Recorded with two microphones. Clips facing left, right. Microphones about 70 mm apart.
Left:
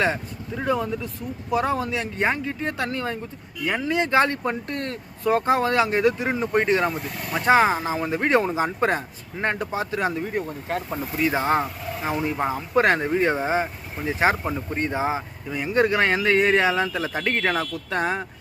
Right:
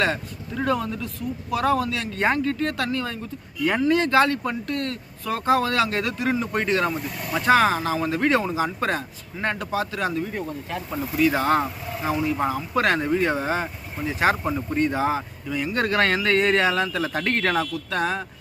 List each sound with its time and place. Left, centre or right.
0.5 s speech: centre
2.2 s speech: centre; by 3.2 s left
3.8 s speech: centre
10.2 s speech: left
11.2 s speech: left
14.4 s speech: centre
14.8 s speech: left
17.6 s speech: left